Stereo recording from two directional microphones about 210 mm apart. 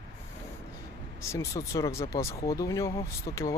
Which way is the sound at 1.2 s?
15° left (ahead or behind).